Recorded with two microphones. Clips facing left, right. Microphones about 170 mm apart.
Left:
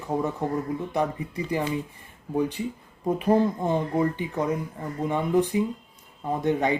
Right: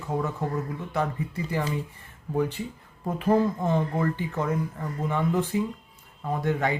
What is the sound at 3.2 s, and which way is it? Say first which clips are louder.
Speech: even; 15° left (ahead or behind).